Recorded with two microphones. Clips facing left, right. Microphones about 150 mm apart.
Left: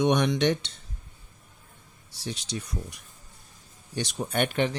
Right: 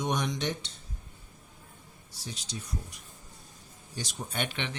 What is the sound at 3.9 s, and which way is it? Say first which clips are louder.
Speech: left 8 dB; 70° left (ahead or behind).